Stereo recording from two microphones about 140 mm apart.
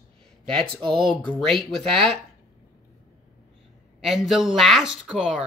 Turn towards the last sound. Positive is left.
turn(degrees=-5)  # may be behind; listen again after turning